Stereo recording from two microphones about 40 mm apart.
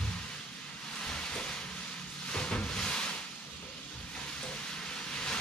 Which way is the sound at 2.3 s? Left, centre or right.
Left.